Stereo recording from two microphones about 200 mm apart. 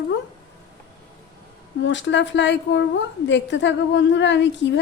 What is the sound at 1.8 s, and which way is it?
A woman's voice, 65° left (ahead or behind).